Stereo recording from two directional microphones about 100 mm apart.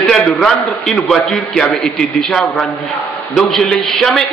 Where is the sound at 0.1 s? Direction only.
5° left (ahead or behind).